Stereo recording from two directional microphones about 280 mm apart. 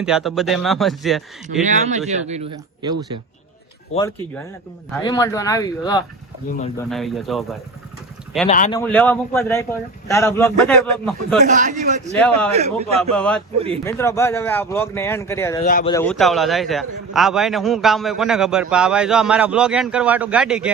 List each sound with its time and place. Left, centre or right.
0.0 s a man's voice: centre
1.6 s speech: right
4.9 s speech: centre
6.7 s a man's voice: centre
8.4 s speech: left
8.7 s speech: centre
11.4 s speech: right
13.0 s a man's voice: centre
15.6 s speech: left
15.9 s a man's voice: centre